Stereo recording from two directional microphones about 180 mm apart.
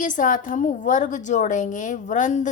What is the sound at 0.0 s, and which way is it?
A woman's voice, 45° left (ahead or behind).